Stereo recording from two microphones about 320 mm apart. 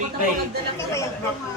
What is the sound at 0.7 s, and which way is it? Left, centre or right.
Speech, centre.